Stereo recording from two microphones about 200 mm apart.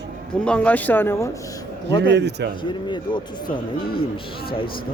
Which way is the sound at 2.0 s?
60° right (ahead or behind).